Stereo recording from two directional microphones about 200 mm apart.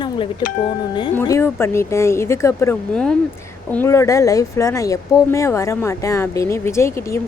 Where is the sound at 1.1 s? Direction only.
10° left (ahead or behind).